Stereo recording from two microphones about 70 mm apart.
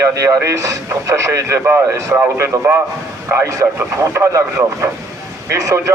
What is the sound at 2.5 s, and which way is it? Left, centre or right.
A man's voice, right.